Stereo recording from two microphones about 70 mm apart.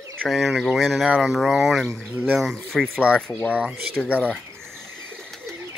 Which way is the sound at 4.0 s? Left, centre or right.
Centre.